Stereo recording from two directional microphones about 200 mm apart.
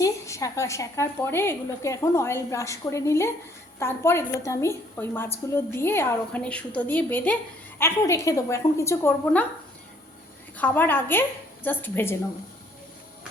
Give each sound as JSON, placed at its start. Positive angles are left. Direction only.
{"t": 0.0, "sound": "a woman's voice", "side_deg": 15}
{"t": 10.6, "sound": "a woman's voice", "side_deg": 10}